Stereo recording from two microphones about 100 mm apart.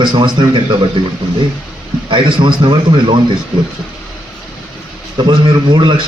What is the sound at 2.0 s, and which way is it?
A man's voice, 55° right (ahead or behind).